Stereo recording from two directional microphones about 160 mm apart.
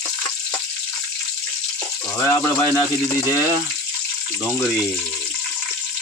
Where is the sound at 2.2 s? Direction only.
15° left (ahead or behind).